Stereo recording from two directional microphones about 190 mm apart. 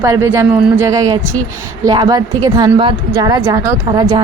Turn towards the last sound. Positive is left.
turn(degrees=-20)  # may be behind; listen again after turning